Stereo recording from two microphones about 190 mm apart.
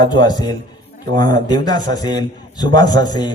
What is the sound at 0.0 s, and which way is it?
A man's voice, 20° left (ahead or behind).